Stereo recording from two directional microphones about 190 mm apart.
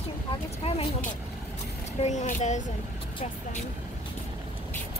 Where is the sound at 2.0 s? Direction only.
40° left (ahead or behind).